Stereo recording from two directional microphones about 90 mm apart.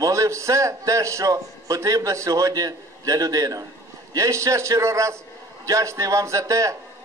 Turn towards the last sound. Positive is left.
turn(degrees=-35)  # may be behind; listen again after turning